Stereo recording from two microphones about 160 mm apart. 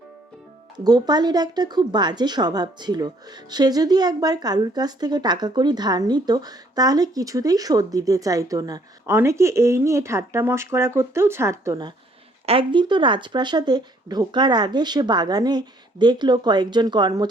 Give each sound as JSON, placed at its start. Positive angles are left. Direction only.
{"t": 0.9, "sound": "a woman's voice", "side_deg": -25}